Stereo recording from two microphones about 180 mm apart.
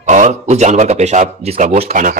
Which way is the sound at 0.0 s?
40° right (ahead or behind).